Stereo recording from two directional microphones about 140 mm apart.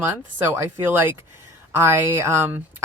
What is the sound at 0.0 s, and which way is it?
Speech, 15° right (ahead or behind).